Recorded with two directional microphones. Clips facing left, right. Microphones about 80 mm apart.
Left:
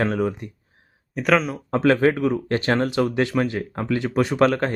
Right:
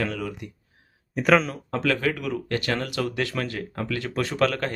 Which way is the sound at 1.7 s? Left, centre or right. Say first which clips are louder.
Left 7 dB; left.